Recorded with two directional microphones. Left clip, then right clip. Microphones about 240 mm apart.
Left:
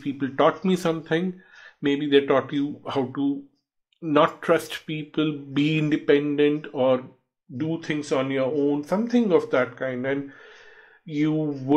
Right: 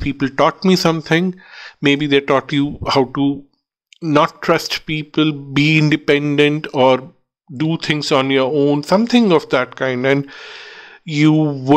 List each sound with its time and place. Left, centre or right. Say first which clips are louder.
0.0 s speech: right 6 dB; right
7.5 s speech: right 8 dB; right